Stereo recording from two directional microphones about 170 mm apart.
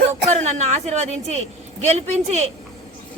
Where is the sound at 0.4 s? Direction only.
40° right (ahead or behind).